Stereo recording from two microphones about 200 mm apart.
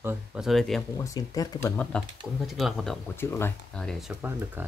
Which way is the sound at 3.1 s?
10° left (ahead or behind).